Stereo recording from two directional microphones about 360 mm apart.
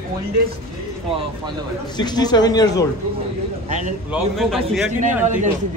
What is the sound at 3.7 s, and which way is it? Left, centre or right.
Speech, centre.